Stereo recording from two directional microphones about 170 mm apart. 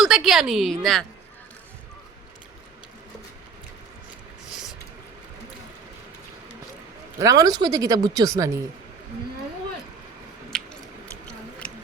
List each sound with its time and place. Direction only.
0.0 s a woman's voice: centre (ahead or behind)
4.4 s a sound: 5° right (ahead or behind)
7.2 s speech: 20° right (ahead or behind)